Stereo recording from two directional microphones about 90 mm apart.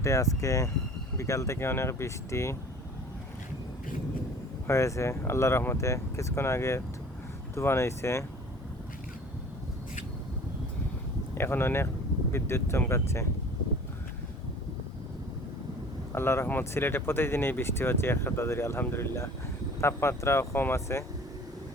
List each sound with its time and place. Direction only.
0.0 s speech: 35° left (ahead or behind)
4.6 s speech: 35° left (ahead or behind)
11.3 s speech: 25° left (ahead or behind)
16.1 s speech: 30° left (ahead or behind)